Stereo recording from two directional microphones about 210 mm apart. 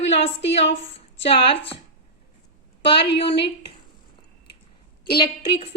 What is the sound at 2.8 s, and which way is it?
Speech, 25° left (ahead or behind).